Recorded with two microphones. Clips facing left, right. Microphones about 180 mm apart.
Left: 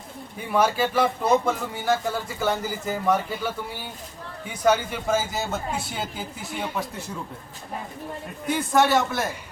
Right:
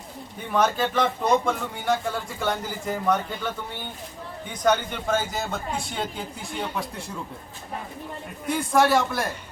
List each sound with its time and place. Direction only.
0.5 s speech: 10° left (ahead or behind)
8.4 s speech: centre (ahead or behind)